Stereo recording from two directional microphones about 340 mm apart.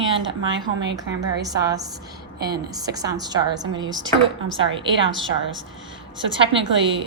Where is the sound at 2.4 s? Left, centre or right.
Right.